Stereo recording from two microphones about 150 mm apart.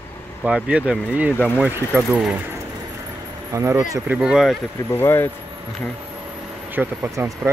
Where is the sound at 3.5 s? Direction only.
20° right (ahead or behind).